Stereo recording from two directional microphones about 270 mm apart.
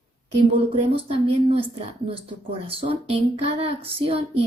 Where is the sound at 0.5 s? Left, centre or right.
Right.